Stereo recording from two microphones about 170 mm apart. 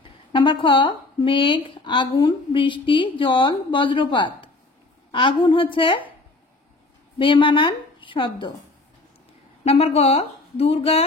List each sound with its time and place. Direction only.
0.3 s speech: 30° left (ahead or behind)
7.2 s speech: 30° left (ahead or behind)
9.7 s a woman's voice: 35° left (ahead or behind)